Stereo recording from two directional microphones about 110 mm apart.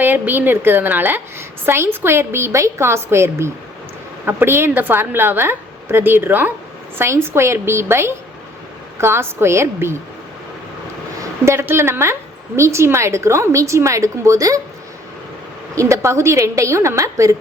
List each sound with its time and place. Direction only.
0.0 s a woman's voice: 20° right (ahead or behind)
11.2 s a woman's voice: 25° right (ahead or behind)
15.7 s a woman's voice: 30° right (ahead or behind)